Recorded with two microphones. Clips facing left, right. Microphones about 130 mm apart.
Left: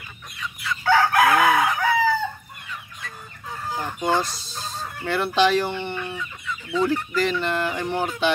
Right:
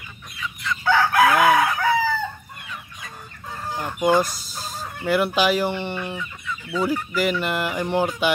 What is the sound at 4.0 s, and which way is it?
Speech, 10° right (ahead or behind).